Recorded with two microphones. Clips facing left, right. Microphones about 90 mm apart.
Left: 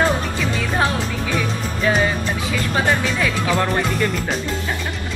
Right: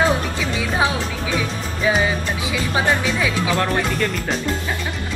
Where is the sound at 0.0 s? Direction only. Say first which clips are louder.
Even; 5° right (ahead or behind).